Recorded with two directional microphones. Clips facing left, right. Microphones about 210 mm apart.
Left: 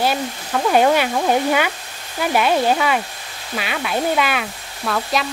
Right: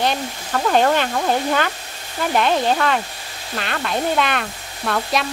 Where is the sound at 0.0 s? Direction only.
5° left (ahead or behind).